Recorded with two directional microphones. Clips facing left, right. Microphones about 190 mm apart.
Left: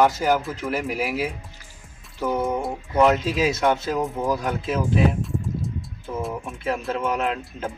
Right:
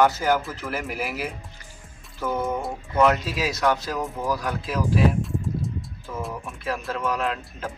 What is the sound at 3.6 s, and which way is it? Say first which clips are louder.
Speech: left 2 dB; 25° left (ahead or behind).